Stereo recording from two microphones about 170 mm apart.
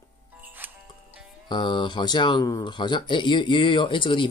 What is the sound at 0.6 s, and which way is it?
Music, 10° right (ahead or behind).